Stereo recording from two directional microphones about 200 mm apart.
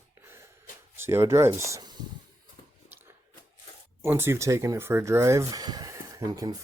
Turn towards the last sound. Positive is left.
turn(degrees=-20)  # may be behind; listen again after turning